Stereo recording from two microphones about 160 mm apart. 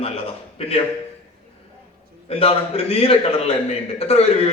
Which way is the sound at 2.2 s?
40° left (ahead or behind).